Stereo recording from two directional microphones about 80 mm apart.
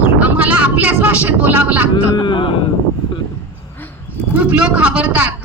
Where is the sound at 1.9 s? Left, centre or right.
Left.